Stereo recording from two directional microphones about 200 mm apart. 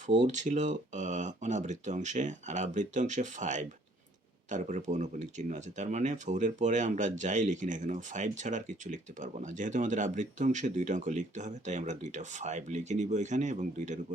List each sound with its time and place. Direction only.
0.1 s speech: 35° right (ahead or behind)